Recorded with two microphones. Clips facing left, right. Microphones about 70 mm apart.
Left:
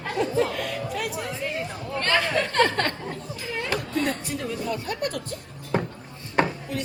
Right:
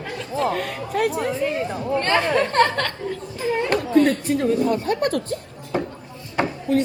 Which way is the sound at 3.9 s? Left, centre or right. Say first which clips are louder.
Right 13 dB; right.